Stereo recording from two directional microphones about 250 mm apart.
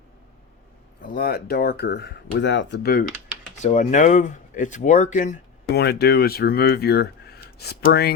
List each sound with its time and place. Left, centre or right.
1.0 s speech: left